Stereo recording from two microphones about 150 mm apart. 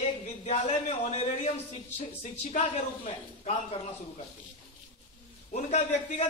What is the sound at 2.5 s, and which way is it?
A man's voice, 45° left (ahead or behind).